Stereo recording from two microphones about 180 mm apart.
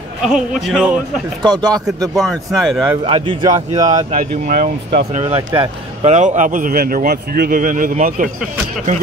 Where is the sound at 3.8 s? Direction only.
40° right (ahead or behind).